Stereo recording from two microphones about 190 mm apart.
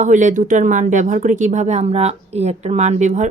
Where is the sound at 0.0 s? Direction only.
40° right (ahead or behind).